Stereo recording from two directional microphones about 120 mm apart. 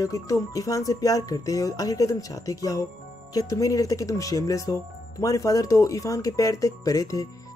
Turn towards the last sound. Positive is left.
turn(degrees=30)  # may be behind; listen again after turning